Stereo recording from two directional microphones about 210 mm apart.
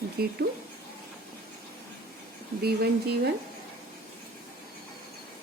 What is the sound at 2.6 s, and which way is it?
Speech, 50° right (ahead or behind).